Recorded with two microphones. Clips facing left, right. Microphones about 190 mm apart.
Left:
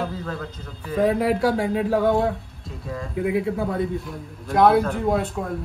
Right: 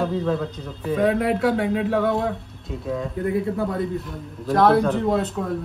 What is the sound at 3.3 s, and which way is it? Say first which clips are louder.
Speech: even; 5° left (ahead or behind).